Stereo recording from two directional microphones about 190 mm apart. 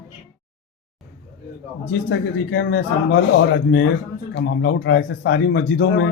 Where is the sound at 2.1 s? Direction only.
70° left (ahead or behind).